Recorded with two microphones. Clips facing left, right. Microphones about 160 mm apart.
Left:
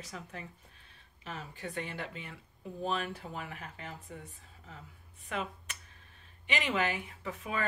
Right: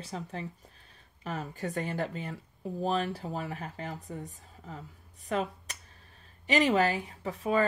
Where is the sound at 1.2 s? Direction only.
45° right (ahead or behind).